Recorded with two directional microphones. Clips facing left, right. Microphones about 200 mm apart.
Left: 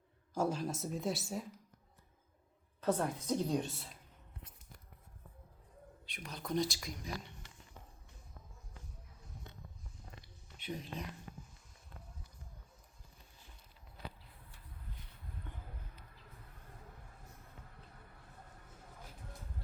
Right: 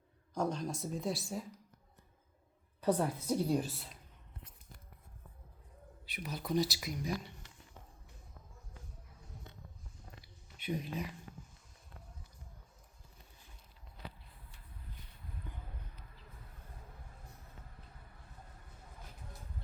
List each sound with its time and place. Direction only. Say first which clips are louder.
0.3 s speech: left 1 dB; 5° left (ahead or behind)
2.8 s a woman's voice: right 2 dB; 10° right (ahead or behind)
6.1 s speech: right 3 dB; 5° right (ahead or behind)
10.6 s speech: right 5 dB; 10° right (ahead or behind)
15.5 s a sound: right 2 dB; centre (ahead or behind)